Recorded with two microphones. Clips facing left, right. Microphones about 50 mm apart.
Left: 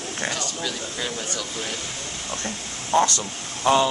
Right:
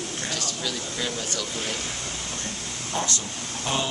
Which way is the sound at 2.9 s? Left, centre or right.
Left.